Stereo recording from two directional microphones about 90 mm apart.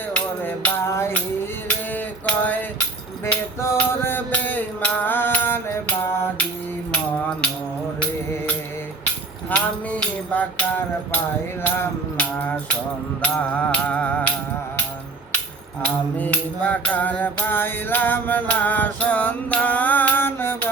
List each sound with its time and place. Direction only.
0.1 s music: 15° left (ahead or behind)
0.9 s music: 30° left (ahead or behind)
2.2 s music: 20° left (ahead or behind)
9.6 s music: 15° left (ahead or behind)
12.4 s mantra: 15° left (ahead or behind)
15.8 s mantra: 15° left (ahead or behind)